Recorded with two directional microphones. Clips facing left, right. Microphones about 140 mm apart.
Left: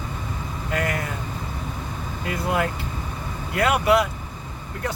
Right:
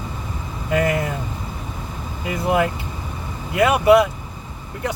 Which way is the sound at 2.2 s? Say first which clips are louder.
Right 5 dB; 20° right (ahead or behind).